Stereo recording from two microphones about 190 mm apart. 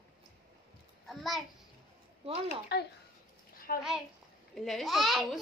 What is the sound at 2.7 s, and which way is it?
Speech, 60° left (ahead or behind).